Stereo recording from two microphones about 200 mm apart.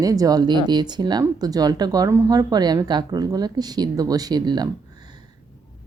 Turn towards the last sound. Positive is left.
turn(degrees=-20)  # may be behind; listen again after turning